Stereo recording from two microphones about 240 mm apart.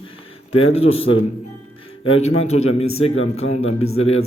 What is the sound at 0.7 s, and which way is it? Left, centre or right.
A man's voice, left.